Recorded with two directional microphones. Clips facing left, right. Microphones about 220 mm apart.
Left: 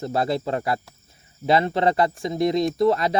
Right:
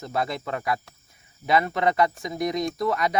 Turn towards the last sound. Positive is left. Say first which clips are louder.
# left 6 dB
turn(degrees=30)  # may be behind; listen again after turning